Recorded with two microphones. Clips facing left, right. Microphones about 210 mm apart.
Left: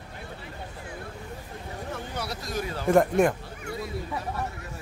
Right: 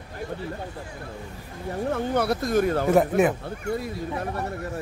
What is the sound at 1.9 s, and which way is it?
Speech, 55° right (ahead or behind).